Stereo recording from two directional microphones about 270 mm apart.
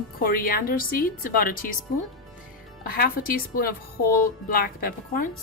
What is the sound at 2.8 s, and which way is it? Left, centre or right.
A woman's voice, left.